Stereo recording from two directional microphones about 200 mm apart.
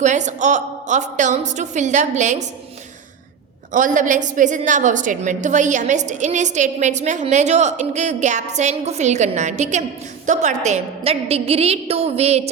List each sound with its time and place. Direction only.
0.0 s a woman's voice: 35° right (ahead or behind)
3.7 s a woman's voice: 40° right (ahead or behind)